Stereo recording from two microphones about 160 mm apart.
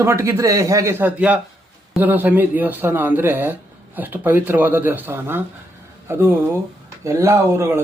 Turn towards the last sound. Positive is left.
turn(degrees=-15)  # may be behind; listen again after turning